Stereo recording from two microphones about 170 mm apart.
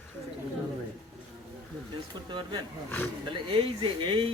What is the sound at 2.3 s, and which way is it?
Speech, 25° right (ahead or behind).